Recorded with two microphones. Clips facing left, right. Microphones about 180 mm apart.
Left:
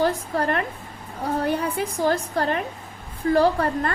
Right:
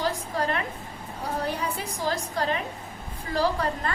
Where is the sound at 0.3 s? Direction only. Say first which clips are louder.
Left 3 dB; 55° left (ahead or behind).